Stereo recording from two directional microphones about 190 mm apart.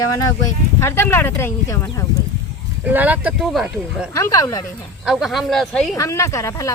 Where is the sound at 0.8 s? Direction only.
10° left (ahead or behind).